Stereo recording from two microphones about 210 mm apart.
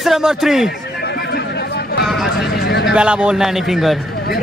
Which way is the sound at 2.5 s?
50° left (ahead or behind).